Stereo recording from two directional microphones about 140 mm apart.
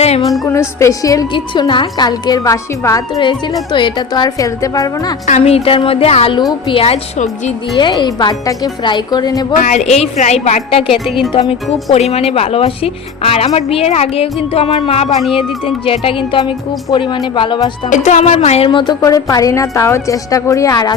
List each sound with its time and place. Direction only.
0.2 s speech: centre (ahead or behind)
0.8 s a woman's voice: 25° left (ahead or behind)
1.3 s a woman's voice: 35° left (ahead or behind)
5.2 s speech: 50° left (ahead or behind); by 9.6 s 30° left (ahead or behind)
9.6 s speech: 60° left (ahead or behind); by 11.0 s 45° left (ahead or behind)
11.0 s speech: centre (ahead or behind)
11.3 s speech: 40° left (ahead or behind)
17.8 s speech: 60° left (ahead or behind)
18.7 s a woman's voice: 35° left (ahead or behind)